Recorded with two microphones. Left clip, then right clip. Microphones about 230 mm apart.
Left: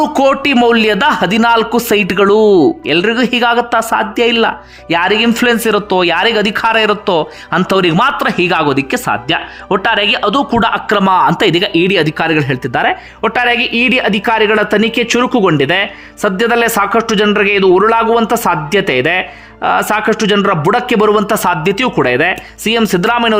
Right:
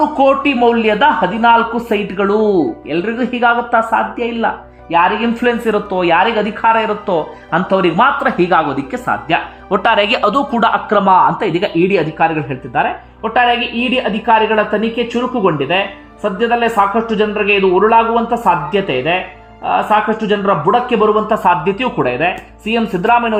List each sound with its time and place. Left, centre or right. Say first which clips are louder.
0.5 s speech: left 2 dB; left
13.9 s speech: left 1 dB; left